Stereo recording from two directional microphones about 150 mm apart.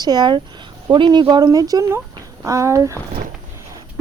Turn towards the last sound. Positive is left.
turn(degrees=-20)  # may be behind; listen again after turning